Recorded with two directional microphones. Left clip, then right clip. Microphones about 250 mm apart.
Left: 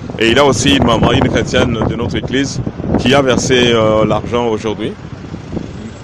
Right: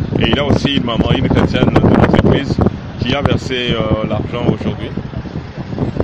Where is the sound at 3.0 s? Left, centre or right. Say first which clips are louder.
Left 5 dB; left.